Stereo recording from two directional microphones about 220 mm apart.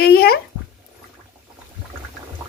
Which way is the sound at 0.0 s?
45° left (ahead or behind).